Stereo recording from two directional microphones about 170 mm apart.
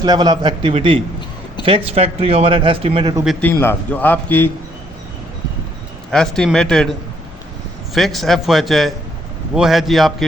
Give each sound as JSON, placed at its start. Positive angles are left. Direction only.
{"t": 0.0, "sound": "a man's voice", "side_deg": -25}
{"t": 3.5, "sound": "a man's voice", "side_deg": 15}
{"t": 6.1, "sound": "a man's voice", "side_deg": 5}
{"t": 7.9, "sound": "a man's voice", "side_deg": 0}